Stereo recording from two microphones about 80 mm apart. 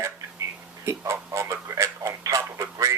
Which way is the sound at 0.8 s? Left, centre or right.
Right.